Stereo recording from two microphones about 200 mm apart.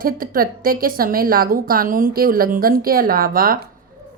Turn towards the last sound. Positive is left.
turn(degrees=-45)  # may be behind; listen again after turning